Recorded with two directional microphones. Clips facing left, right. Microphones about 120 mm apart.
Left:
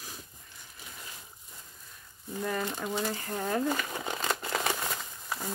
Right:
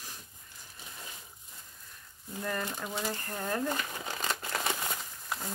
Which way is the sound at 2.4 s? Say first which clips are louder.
Left 3 dB; 10° left (ahead or behind).